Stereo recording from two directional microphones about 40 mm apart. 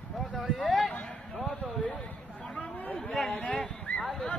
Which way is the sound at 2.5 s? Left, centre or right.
Left.